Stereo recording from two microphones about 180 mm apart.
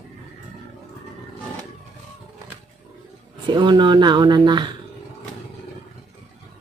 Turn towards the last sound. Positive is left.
turn(degrees=-25)  # may be behind; listen again after turning